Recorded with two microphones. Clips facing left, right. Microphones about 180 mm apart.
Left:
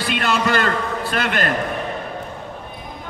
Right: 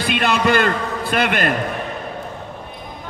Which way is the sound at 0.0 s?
20° right (ahead or behind).